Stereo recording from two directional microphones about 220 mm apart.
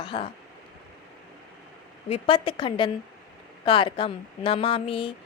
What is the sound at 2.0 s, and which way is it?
Speech, 25° left (ahead or behind).